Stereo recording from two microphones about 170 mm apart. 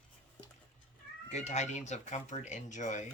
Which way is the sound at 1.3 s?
40° left (ahead or behind).